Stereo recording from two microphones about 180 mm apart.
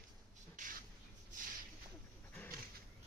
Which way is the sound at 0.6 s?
45° right (ahead or behind).